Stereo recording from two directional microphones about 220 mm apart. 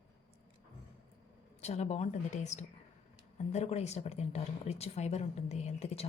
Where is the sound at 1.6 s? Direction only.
30° left (ahead or behind).